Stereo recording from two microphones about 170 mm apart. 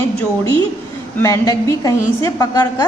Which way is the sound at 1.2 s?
20° left (ahead or behind).